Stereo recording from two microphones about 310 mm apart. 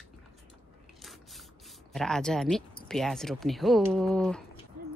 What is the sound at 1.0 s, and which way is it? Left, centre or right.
Speech, centre.